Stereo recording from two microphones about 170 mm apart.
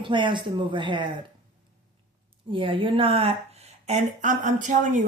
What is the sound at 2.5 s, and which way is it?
Speech, 30° right (ahead or behind).